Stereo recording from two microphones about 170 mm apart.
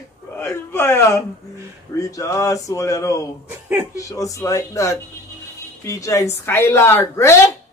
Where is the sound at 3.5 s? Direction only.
10° right (ahead or behind).